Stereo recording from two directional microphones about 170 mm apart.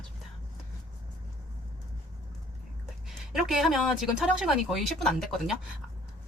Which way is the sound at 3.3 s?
Centre (ahead or behind).